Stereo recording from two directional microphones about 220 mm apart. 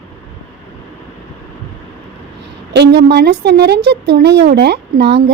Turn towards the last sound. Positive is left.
turn(degrees=-50)  # may be behind; listen again after turning